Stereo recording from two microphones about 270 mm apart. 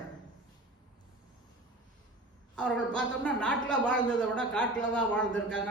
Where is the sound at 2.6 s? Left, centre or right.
Centre.